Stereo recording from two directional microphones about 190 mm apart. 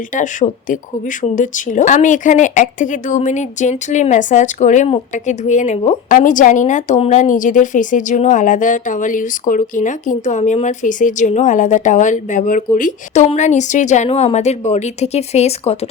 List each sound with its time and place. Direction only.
0.1 s speech: 40° left (ahead or behind)